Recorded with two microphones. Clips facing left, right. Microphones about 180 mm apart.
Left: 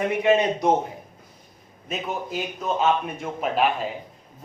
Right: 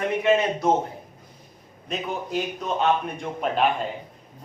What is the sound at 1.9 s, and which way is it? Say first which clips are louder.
Speech: right 1 dB; centre (ahead or behind).